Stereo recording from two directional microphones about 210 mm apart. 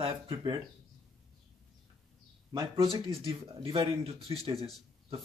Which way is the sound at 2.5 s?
20° right (ahead or behind).